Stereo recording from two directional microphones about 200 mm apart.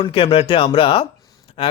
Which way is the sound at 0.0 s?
25° left (ahead or behind).